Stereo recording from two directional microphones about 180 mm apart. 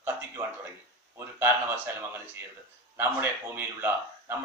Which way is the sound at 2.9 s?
10° right (ahead or behind).